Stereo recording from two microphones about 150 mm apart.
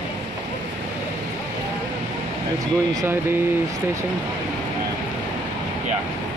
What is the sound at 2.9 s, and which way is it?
Speech, 25° right (ahead or behind).